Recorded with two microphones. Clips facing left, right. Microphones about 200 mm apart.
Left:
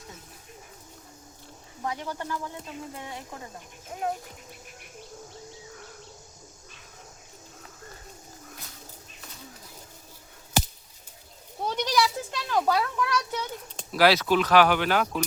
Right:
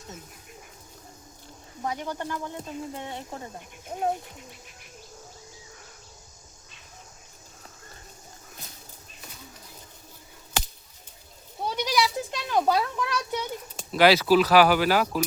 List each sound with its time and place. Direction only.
1.8 s speech: 20° right (ahead or behind)
11.6 s a sound: 5° right (ahead or behind); by 13.4 s 25° right (ahead or behind)
13.7 s speech: centre (ahead or behind)